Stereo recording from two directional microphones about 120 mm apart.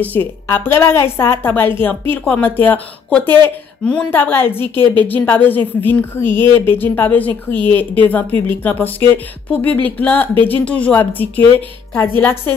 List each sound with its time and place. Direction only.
0.0 s a woman's voice: 15° left (ahead or behind)